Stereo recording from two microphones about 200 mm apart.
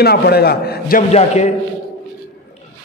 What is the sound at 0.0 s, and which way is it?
A man's voice, 50° left (ahead or behind).